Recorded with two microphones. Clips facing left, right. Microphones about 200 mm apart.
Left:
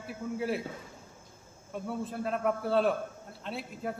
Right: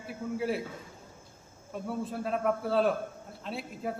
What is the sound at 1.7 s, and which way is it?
A man's voice, centre (ahead or behind).